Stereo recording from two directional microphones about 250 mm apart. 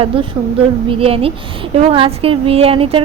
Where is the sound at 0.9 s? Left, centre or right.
Right.